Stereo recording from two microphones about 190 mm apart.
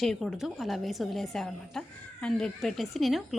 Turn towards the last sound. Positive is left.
turn(degrees=0)  # may be behind; listen again after turning